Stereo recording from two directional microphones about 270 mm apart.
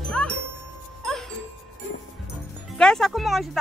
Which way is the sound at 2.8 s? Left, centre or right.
Centre.